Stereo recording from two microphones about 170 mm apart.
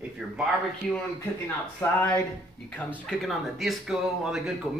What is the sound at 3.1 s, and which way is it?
Speech, centre (ahead or behind).